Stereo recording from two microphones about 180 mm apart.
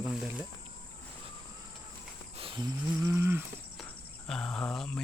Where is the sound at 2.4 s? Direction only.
30° right (ahead or behind).